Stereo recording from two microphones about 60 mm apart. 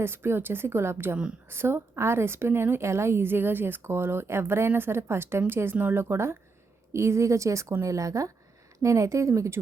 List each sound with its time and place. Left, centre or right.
0.0 s a woman's voice: right
3.2 s a woman's voice: right
6.9 s a woman's voice: right